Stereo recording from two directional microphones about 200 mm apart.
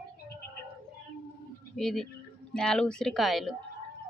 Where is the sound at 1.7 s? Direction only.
Centre (ahead or behind).